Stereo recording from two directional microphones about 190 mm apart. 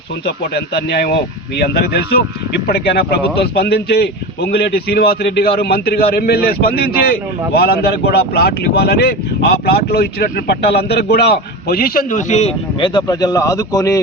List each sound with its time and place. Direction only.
0.3 s speech: 60° left (ahead or behind); by 14.0 s 15° left (ahead or behind)